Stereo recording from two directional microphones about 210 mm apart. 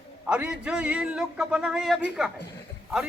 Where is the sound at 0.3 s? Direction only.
5° right (ahead or behind).